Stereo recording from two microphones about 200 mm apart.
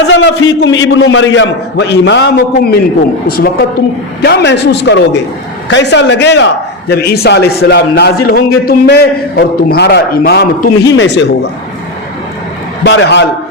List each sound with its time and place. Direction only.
0.0 s a man's voice: 65° left (ahead or behind)
12.8 s a man's voice: 65° left (ahead or behind)